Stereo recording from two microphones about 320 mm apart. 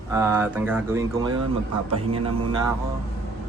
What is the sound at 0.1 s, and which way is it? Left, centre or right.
Speech, centre.